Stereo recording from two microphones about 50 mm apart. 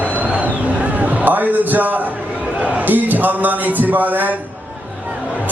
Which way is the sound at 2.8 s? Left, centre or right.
Right.